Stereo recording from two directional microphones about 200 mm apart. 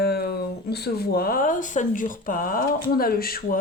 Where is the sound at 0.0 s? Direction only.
55° left (ahead or behind).